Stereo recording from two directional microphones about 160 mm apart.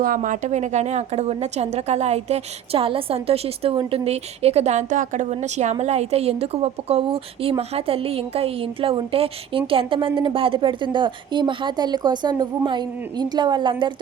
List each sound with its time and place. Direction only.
0.0 s a woman's voice: 55° right (ahead or behind); by 13.9 s 30° right (ahead or behind)